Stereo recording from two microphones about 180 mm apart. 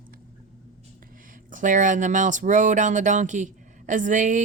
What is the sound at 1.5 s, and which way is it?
Speech, 45° right (ahead or behind).